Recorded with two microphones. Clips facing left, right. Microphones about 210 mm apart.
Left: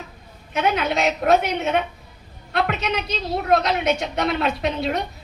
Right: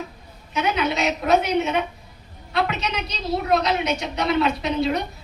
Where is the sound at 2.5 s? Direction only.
55° left (ahead or behind).